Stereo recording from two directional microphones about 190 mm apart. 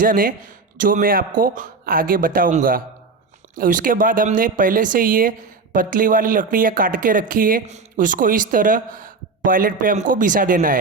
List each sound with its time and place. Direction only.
0.0 s speech: 45° right (ahead or behind)